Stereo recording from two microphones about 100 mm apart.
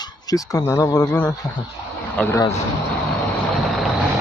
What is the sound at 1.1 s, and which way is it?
Speech, 15° left (ahead or behind).